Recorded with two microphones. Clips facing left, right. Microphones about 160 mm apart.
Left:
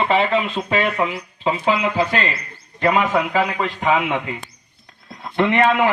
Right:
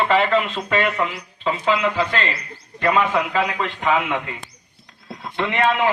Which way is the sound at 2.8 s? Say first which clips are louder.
Left 1 dB; 40° left (ahead or behind).